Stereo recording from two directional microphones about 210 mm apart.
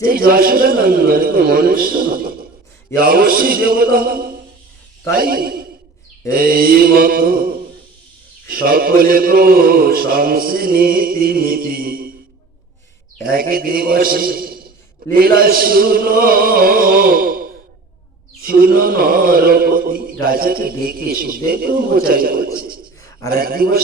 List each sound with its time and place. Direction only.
0.0 s a man's voice: 45° right (ahead or behind)
13.2 s a man's voice: 45° right (ahead or behind)